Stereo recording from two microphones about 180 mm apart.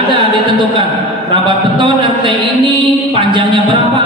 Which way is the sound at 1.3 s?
25° right (ahead or behind).